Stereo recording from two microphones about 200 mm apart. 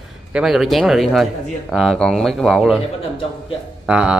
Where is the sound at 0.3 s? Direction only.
Centre (ahead or behind).